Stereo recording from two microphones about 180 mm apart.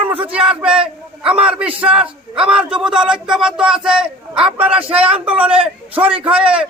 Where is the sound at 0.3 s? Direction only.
5° right (ahead or behind).